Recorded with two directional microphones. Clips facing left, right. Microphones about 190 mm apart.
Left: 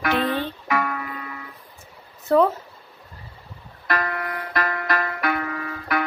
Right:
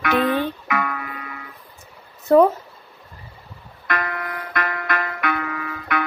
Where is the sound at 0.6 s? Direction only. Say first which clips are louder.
Even; 35° left (ahead or behind).